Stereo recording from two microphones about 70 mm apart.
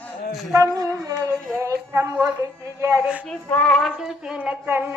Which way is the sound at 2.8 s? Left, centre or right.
Right.